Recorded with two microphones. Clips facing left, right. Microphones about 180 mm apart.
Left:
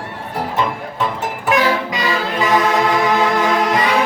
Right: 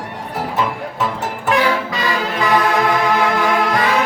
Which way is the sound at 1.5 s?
20° left (ahead or behind).